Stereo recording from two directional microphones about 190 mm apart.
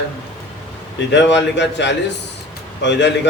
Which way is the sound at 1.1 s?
65° left (ahead or behind).